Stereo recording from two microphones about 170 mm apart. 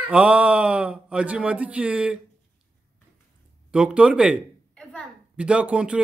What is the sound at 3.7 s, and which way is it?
Speech, 5° right (ahead or behind).